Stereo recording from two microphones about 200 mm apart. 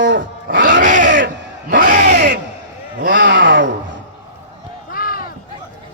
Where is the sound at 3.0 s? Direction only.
45° right (ahead or behind).